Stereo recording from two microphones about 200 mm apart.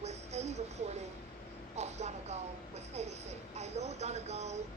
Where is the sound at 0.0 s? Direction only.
35° right (ahead or behind).